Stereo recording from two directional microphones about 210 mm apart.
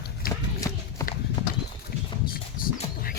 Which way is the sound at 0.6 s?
15° left (ahead or behind).